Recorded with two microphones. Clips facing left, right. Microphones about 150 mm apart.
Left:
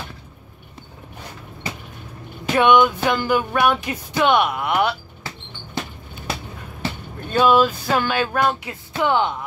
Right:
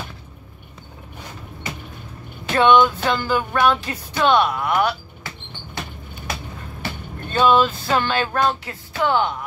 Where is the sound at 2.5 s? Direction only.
15° left (ahead or behind).